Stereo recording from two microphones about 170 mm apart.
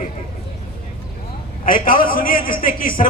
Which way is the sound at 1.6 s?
55° left (ahead or behind).